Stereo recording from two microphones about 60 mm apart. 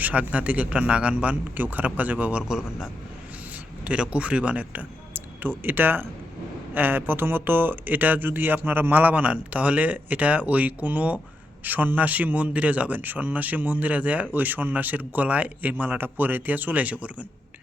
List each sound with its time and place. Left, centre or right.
0.0 s speech: right
2.5 s a man's voice: centre
3.8 s speech: centre